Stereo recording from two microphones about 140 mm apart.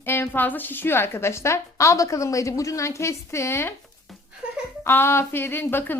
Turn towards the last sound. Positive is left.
turn(degrees=15)  # may be behind; listen again after turning